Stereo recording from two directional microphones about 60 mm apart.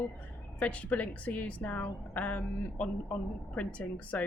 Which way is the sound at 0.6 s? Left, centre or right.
Left.